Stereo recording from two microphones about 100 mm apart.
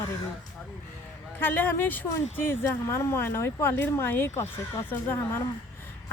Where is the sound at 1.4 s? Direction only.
20° left (ahead or behind).